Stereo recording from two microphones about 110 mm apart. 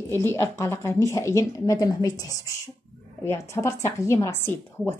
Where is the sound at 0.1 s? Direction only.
25° left (ahead or behind).